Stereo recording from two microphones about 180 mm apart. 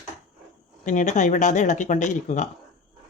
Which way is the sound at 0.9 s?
45° left (ahead or behind).